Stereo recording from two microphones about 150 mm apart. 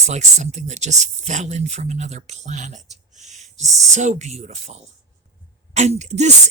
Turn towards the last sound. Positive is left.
turn(degrees=-50)  # may be behind; listen again after turning